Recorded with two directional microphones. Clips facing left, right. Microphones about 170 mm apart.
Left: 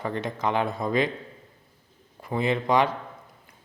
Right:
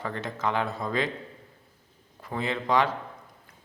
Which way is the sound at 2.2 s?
15° left (ahead or behind).